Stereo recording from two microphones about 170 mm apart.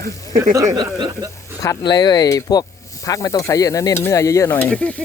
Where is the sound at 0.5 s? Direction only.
20° right (ahead or behind).